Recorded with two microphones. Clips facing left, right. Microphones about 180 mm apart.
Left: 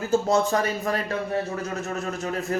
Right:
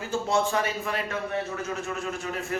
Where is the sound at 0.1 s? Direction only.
40° left (ahead or behind).